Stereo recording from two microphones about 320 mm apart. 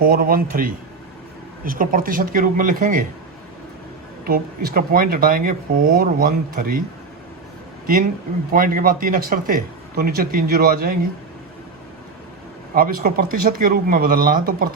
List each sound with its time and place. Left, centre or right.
0.0 s speech: right
4.3 s speech: right
8.5 s speech: right
12.7 s speech: right